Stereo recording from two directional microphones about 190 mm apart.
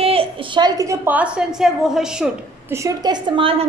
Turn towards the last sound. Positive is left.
turn(degrees=-25)  # may be behind; listen again after turning